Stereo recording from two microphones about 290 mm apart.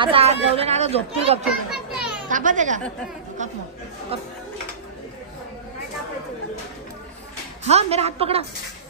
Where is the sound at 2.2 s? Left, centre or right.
Right.